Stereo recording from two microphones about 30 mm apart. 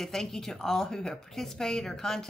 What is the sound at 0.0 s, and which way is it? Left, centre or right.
A woman's voice, centre.